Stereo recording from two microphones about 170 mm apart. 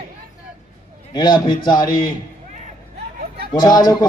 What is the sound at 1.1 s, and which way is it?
Speech, 25° left (ahead or behind).